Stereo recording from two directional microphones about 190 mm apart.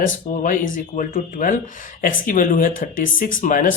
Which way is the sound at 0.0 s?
45° left (ahead or behind).